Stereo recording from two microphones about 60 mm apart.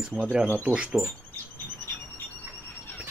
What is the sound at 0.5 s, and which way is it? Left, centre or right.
Speech, right.